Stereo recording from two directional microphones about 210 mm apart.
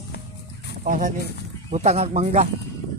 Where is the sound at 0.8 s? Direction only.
40° right (ahead or behind).